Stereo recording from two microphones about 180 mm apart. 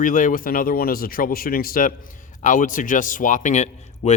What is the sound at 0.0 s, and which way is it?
Speech, 45° left (ahead or behind).